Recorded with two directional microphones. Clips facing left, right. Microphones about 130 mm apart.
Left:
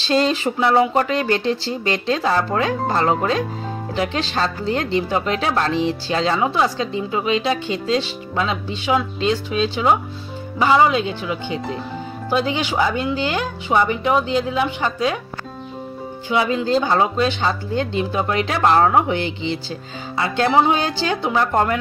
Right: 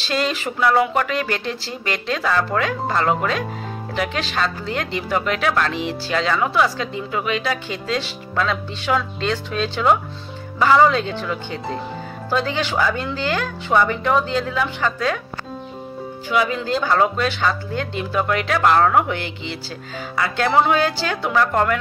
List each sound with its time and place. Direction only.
0.0 s speech: 30° left (ahead or behind)
16.3 s speech: 25° left (ahead or behind)